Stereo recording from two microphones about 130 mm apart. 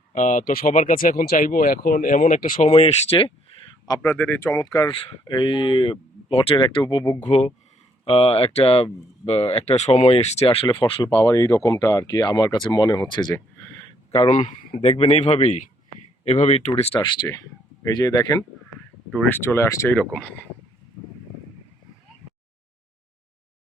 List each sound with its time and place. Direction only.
0.1 s speech: 70° left (ahead or behind)
2.6 s speech: 50° left (ahead or behind)
3.8 s speech: 25° left (ahead or behind)
7.2 s speech: 60° left (ahead or behind)
8.0 s speech: 45° left (ahead or behind)
11.1 s speech: 25° left (ahead or behind)
14.3 s speech: 75° left (ahead or behind)
16.2 s speech: 50° left (ahead or behind)
17.8 s speech: 30° left (ahead or behind)
19.3 s speech: 20° left (ahead or behind)
20.0 s speech: 10° left (ahead or behind)